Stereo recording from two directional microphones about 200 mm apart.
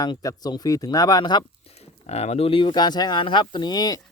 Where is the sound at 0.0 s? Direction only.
20° left (ahead or behind).